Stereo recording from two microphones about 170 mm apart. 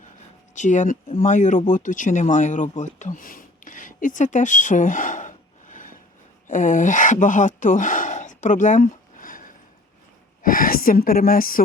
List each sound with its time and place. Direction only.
0.5 s speech: 45° left (ahead or behind)
10.4 s speech: 55° left (ahead or behind)